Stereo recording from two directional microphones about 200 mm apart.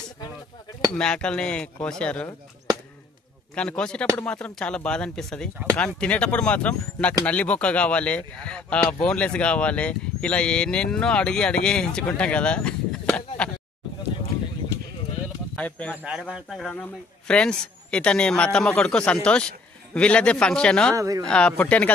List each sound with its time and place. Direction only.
0.9 s speech: 5° left (ahead or behind)
3.5 s speech: 5° left (ahead or behind)
15.5 s speech: 5° left (ahead or behind)
16.0 s speech: 5° right (ahead or behind)
20.9 s speech: 15° right (ahead or behind)
21.2 s speech: 5° left (ahead or behind)